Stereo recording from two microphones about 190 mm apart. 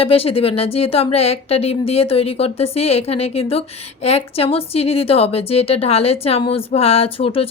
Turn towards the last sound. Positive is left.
turn(degrees=30)  # may be behind; listen again after turning